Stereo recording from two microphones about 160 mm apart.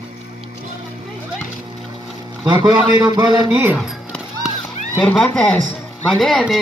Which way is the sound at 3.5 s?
10° right (ahead or behind).